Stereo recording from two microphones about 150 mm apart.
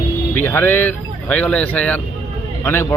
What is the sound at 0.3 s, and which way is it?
Speech, 15° left (ahead or behind).